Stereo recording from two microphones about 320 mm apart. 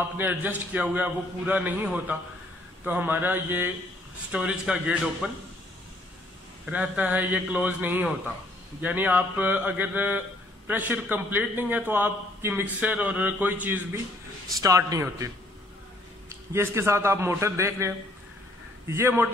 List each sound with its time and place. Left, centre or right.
0.2 s a man's voice: centre
6.6 s a man's voice: centre